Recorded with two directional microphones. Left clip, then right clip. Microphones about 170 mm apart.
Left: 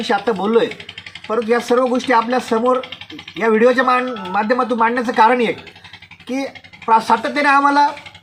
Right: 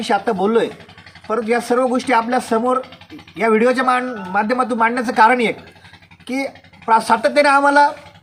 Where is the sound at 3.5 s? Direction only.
25° right (ahead or behind).